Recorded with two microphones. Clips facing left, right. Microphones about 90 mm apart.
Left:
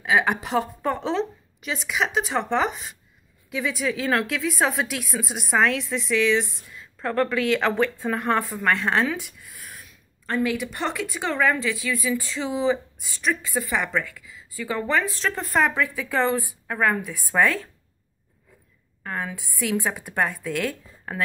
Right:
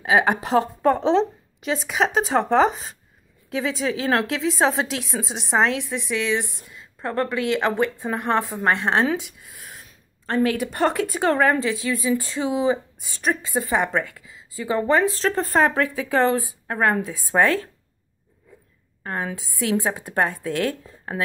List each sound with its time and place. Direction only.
0.0 s a woman's voice: 35° right (ahead or behind)
12.4 s a woman's voice: 20° right (ahead or behind)
19.0 s a woman's voice: 45° right (ahead or behind)
19.8 s a woman's voice: 30° right (ahead or behind)